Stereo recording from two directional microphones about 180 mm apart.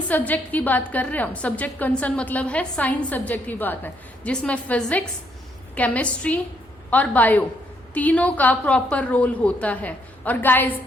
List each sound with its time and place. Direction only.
0.1 s a woman's voice: 10° left (ahead or behind)